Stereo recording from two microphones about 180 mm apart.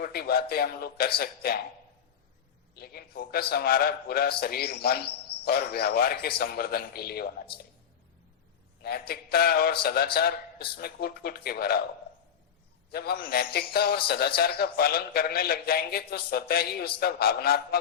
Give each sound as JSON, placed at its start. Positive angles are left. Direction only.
{"t": 0.0, "sound": "a man's voice", "side_deg": 60}
{"t": 2.7, "sound": "a man's voice", "side_deg": 60}
{"t": 8.8, "sound": "a man's voice", "side_deg": 60}
{"t": 12.9, "sound": "a man's voice", "side_deg": 60}